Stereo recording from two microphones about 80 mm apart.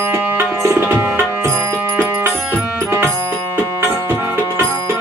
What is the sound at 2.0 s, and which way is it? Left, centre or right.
Music, right.